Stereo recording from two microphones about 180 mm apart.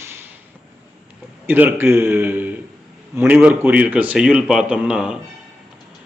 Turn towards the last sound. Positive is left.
turn(degrees=-5)  # may be behind; listen again after turning